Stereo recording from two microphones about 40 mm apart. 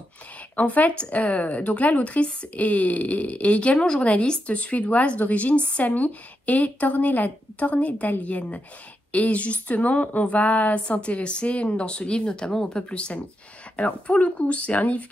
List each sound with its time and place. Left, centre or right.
0.6 s speech: left
2.5 s speech: left